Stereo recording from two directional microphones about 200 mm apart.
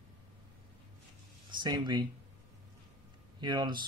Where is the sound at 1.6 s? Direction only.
20° right (ahead or behind).